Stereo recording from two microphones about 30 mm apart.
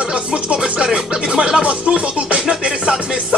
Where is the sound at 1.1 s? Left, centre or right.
Right.